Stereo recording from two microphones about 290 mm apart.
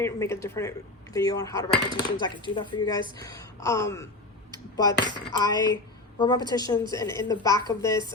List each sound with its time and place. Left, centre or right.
0.0 s speech: centre